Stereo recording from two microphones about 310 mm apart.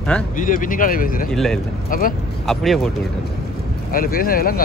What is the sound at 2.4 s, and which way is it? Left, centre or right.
Speech, centre.